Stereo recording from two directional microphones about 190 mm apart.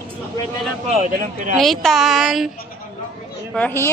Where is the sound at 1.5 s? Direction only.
Centre (ahead or behind).